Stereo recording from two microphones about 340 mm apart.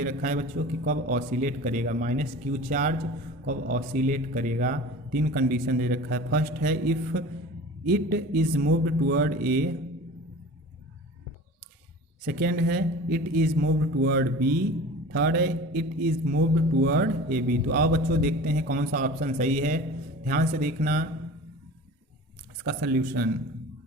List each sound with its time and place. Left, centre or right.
0.0 s speech: right
12.2 s speech: right
22.6 s speech: right